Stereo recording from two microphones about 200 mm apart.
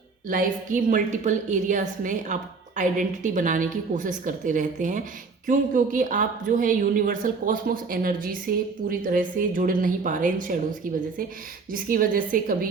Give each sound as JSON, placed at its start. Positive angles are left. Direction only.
{"t": 0.3, "sound": "a woman's voice", "side_deg": -40}
{"t": 11.7, "sound": "a woman's voice", "side_deg": -45}